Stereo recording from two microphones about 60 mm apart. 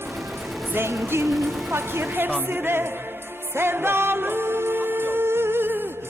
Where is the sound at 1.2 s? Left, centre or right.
Centre.